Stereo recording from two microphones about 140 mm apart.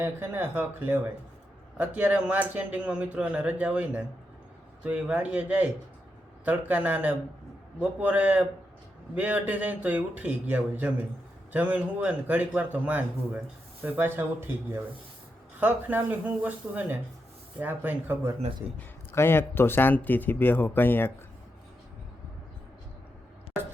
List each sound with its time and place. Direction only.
0.0 s a man's voice: 15° right (ahead or behind)
18.8 s speech: 15° left (ahead or behind)